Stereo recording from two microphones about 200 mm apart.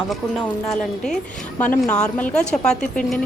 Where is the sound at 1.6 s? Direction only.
5° left (ahead or behind).